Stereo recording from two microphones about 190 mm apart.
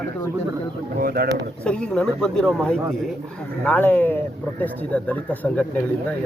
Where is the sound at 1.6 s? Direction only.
5° left (ahead or behind).